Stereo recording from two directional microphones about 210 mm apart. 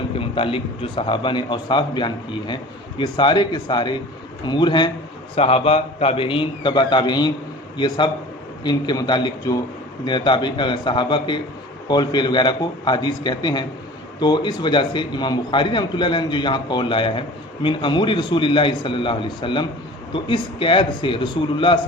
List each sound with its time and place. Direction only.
0.2 s a man's voice: 25° left (ahead or behind)